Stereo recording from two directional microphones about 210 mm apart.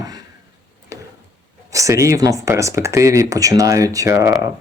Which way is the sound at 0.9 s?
15° right (ahead or behind).